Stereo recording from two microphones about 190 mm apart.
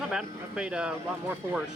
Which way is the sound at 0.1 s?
5° right (ahead or behind).